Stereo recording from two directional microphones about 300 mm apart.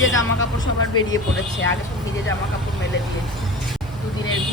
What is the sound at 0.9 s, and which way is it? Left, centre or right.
Speech, left.